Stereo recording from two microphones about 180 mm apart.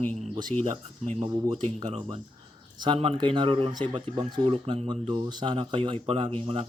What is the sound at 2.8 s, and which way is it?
Speech, 30° right (ahead or behind).